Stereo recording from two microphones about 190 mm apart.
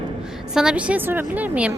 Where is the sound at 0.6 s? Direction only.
5° right (ahead or behind).